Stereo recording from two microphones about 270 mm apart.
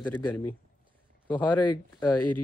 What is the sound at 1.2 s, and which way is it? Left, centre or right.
Speech, centre.